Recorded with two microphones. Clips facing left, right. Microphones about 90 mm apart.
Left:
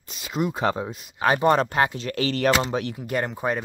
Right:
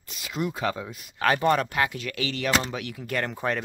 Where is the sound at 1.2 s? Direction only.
20° left (ahead or behind).